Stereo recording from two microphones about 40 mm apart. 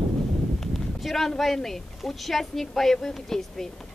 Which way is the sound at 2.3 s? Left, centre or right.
Centre.